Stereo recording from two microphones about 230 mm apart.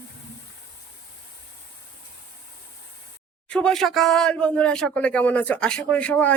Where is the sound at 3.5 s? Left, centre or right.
Centre.